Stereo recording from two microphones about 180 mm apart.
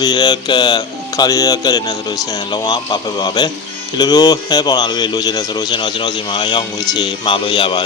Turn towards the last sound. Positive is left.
turn(degrees=25)  # may be behind; listen again after turning